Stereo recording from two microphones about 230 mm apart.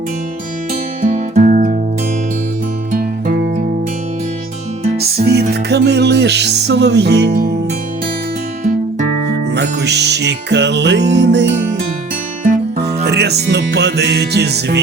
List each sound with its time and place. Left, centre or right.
1.0 s music: right
2.9 s music: right
4.9 s music: right
9.0 s music: left
9.6 s music: right
12.5 s music: right